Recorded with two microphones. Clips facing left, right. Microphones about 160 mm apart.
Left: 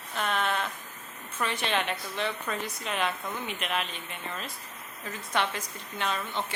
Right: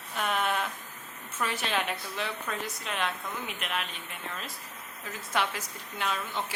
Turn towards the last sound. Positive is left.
turn(degrees=-5)  # may be behind; listen again after turning